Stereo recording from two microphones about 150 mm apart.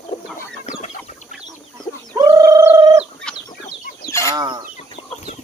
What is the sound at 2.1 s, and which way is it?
Bird, 25° right (ahead or behind).